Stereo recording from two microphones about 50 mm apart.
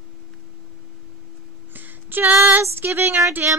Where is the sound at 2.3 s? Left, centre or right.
Right.